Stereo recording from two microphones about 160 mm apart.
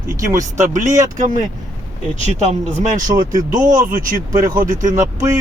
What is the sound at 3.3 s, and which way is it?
Speech, 25° right (ahead or behind).